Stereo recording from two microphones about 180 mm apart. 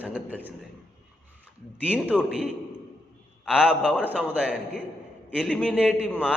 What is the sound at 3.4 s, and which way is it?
A man's voice, 5° right (ahead or behind).